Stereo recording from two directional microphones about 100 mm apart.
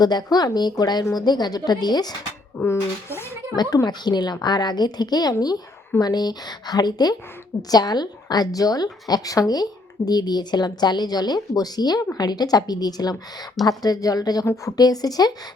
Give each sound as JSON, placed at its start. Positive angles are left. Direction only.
{"t": 0.0, "sound": "speech", "side_deg": 45}
{"t": 2.6, "sound": "speech", "side_deg": 25}
{"t": 3.5, "sound": "a woman's voice", "side_deg": 45}